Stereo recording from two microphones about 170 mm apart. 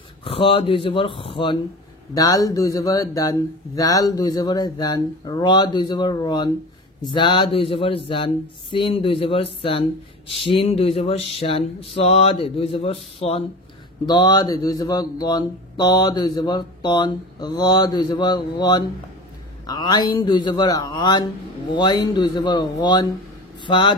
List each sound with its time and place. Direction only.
0.2 s speech: 35° left (ahead or behind)
14.0 s speech: 25° left (ahead or behind)